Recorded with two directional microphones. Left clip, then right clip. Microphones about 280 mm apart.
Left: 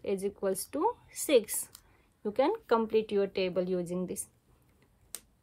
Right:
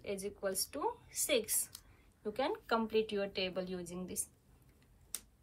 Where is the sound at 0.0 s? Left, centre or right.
Left.